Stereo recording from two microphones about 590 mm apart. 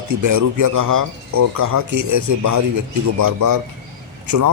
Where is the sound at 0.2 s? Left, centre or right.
Right.